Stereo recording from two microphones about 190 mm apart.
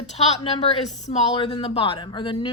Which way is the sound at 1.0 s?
35° left (ahead or behind).